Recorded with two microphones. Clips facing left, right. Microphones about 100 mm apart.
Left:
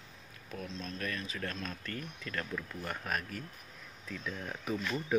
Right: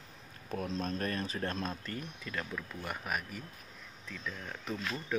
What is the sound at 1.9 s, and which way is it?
Speech, 15° right (ahead or behind).